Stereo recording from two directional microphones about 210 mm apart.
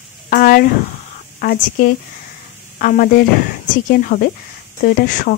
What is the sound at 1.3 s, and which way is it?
A woman's voice, 45° left (ahead or behind).